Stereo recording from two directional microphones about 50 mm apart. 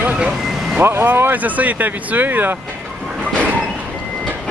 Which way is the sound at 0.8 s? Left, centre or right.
Right.